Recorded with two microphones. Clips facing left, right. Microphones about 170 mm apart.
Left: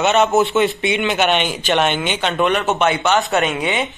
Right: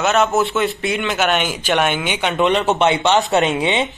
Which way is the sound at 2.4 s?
25° right (ahead or behind).